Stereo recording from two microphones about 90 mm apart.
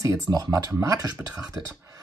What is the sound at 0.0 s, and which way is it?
Speech, 40° right (ahead or behind).